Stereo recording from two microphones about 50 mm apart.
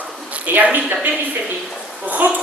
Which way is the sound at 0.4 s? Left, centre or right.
Right.